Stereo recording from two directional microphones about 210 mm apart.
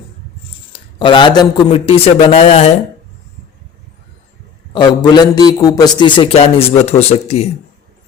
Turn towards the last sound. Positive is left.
turn(degrees=30)  # may be behind; listen again after turning